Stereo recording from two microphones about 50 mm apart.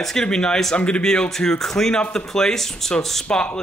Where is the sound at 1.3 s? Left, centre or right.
Centre.